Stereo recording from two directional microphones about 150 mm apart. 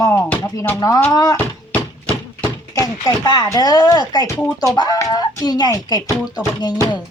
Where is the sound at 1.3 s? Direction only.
10° left (ahead or behind).